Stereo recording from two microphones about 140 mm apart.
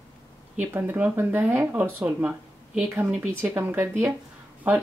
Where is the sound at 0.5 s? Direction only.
15° right (ahead or behind).